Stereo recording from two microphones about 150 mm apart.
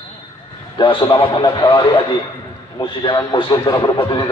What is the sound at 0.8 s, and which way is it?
A man's voice, 35° left (ahead or behind).